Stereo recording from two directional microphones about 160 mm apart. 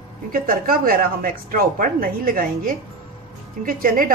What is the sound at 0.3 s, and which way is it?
Speech, 60° right (ahead or behind).